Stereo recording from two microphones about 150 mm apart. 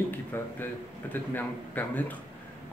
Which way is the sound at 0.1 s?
15° left (ahead or behind).